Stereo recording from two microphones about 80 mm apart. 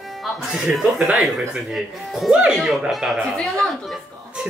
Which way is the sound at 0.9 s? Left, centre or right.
Centre.